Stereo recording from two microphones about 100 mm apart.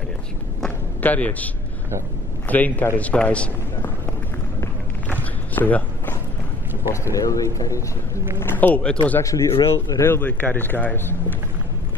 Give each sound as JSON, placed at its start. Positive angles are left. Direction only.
{"t": 0.7, "sound": "a sound", "side_deg": 15}
{"t": 2.4, "sound": "a man's voice", "side_deg": 15}
{"t": 5.0, "sound": "walk", "side_deg": 15}
{"t": 6.9, "sound": "a man's voice", "side_deg": 35}
{"t": 8.4, "sound": "a man's voice", "side_deg": 20}
{"t": 9.2, "sound": "a man's voice", "side_deg": 35}
{"t": 10.0, "sound": "a man's voice", "side_deg": 20}